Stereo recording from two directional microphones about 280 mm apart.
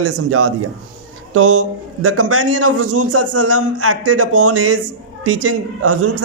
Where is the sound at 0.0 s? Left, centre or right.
Right.